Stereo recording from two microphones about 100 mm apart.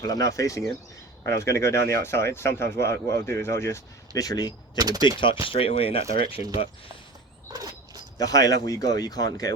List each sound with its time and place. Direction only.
0.0 s speech: 40° left (ahead or behind)
4.8 s speech: 40° right (ahead or behind)
5.0 s speech: 55° left (ahead or behind)
5.5 s speech: 70° left (ahead or behind)
7.5 s a sound: 40° right (ahead or behind)
8.2 s speech: 35° left (ahead or behind)